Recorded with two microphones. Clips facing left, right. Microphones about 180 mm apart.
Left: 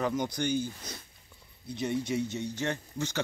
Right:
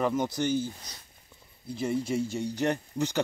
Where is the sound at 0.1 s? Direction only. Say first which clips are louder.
Right 2 dB; 5° right (ahead or behind).